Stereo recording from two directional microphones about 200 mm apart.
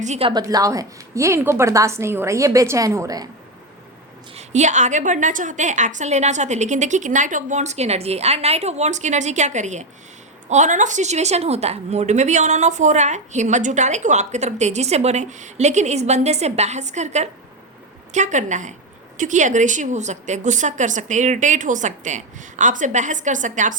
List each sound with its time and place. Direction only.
0.0 s a woman's voice: 30° right (ahead or behind); by 3.2 s 15° right (ahead or behind)
4.4 s a woman's voice: 35° right (ahead or behind)